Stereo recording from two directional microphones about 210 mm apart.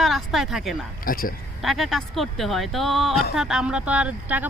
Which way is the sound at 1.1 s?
45° left (ahead or behind).